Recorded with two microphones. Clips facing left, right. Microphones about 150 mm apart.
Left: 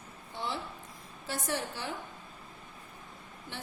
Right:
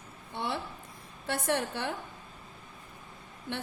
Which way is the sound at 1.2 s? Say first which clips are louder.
Right 5 dB; 60° right (ahead or behind).